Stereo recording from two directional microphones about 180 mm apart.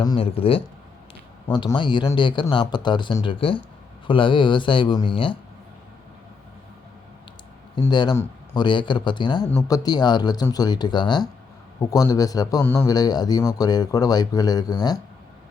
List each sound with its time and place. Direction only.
0.0 s a man's voice: 25° left (ahead or behind)
7.8 s a man's voice: 25° left (ahead or behind)